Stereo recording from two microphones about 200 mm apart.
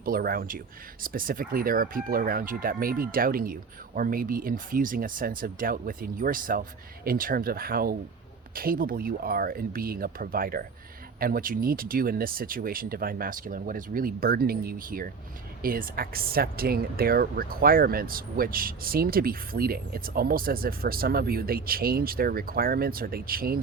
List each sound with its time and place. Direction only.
0.0 s speech: 45° right (ahead or behind)